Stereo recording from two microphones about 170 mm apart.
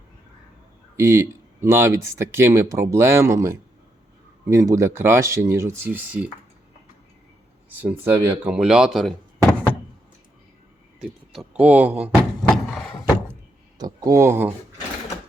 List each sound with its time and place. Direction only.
0.9 s speech: 15° right (ahead or behind)
7.8 s speech: 10° right (ahead or behind)
11.0 s speech: centre (ahead or behind)
12.1 s a sound: 5° left (ahead or behind)
13.7 s speech: 20° right (ahead or behind)